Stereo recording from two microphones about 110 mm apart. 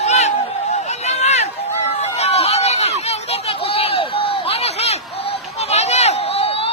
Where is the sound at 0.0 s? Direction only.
85° left.